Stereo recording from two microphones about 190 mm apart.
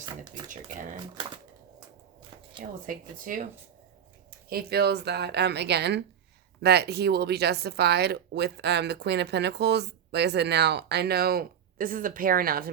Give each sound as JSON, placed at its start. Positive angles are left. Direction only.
{"t": 0.2, "sound": "speech", "side_deg": -45}
{"t": 0.9, "sound": "speech", "side_deg": -25}
{"t": 2.8, "sound": "speech", "side_deg": -45}